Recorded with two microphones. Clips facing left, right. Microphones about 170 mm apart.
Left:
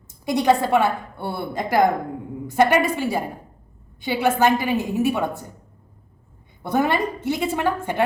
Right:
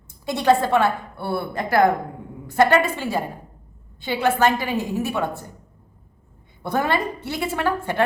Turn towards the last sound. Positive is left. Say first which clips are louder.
# left 1 dB
turn(degrees=15)  # may be behind; listen again after turning